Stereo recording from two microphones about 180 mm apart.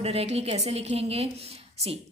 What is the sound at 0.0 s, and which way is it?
A woman's voice, 35° right (ahead or behind).